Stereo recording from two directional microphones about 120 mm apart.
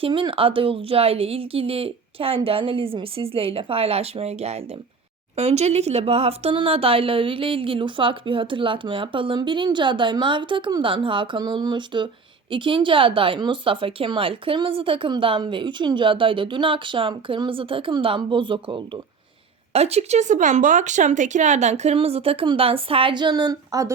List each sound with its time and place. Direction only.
0.0 s speech: 45° right (ahead or behind)
19.7 s speech: 60° right (ahead or behind); by 23.9 s 30° right (ahead or behind)